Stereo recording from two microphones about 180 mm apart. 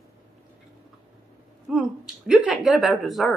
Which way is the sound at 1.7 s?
5° right (ahead or behind).